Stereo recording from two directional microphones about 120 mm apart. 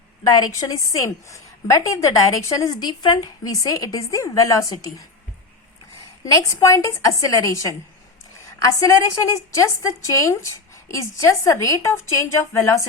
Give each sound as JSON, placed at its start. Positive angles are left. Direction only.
{"t": 0.3, "sound": "a woman's voice", "side_deg": 35}
{"t": 6.2, "sound": "a woman's voice", "side_deg": 30}